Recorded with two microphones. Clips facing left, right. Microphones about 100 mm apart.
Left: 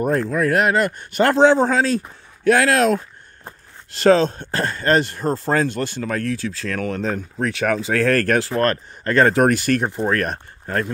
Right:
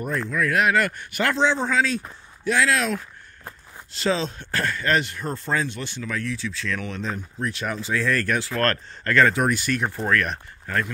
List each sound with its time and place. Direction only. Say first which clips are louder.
0.0 s speech: left 6 dB; 45° left (ahead or behind)
0.7 s speech: left 3 dB; 25° left (ahead or behind)
1.2 s speech: left 8 dB; 50° left (ahead or behind)
2.4 s speech: left 6 dB; 55° left (ahead or behind)
4.5 s speech: left 4 dB; 30° left (ahead or behind); by 7.2 s 50° left (ahead or behind)
7.3 s speech: left 9 dB; 80° left; by 8.5 s 50° left (ahead or behind)
8.5 s speech: left 4 dB; 20° left (ahead or behind)
9.3 s speech: left 7 dB; 55° left (ahead or behind)
9.8 s speech: left 4 dB; 20° left (ahead or behind)
10.1 s speech: left 1 dB; 40° left (ahead or behind)